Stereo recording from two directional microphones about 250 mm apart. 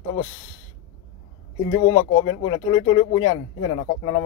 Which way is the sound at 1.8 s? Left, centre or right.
Left.